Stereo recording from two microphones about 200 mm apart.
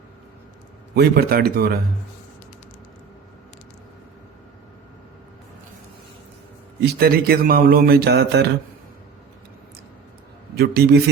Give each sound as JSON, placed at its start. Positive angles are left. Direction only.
{"t": 0.9, "sound": "speech", "side_deg": -55}
{"t": 6.8, "sound": "speech", "side_deg": -50}
{"t": 10.5, "sound": "speech", "side_deg": -50}